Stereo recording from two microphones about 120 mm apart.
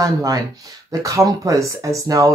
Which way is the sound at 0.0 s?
30° right (ahead or behind).